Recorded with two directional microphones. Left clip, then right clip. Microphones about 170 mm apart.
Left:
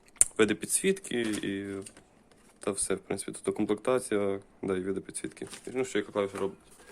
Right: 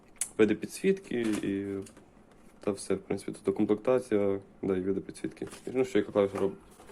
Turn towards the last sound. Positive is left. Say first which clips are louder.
# right 3 dB
turn(degrees=5)  # may be behind; listen again after turning